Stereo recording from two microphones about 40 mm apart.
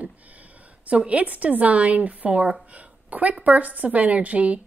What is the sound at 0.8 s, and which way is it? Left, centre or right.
A woman's voice, right.